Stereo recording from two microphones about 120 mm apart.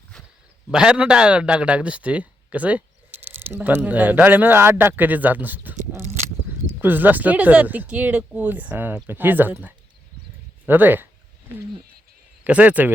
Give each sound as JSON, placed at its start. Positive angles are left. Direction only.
{"t": 0.7, "sound": "a man's voice", "side_deg": -5}
{"t": 6.7, "sound": "a man's voice", "side_deg": -15}
{"t": 12.5, "sound": "a man's voice", "side_deg": -10}